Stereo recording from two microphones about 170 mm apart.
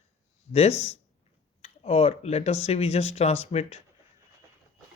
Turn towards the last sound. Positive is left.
turn(degrees=40)  # may be behind; listen again after turning